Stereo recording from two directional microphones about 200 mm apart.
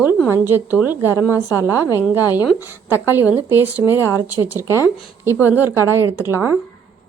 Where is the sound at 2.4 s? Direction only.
10° right (ahead or behind).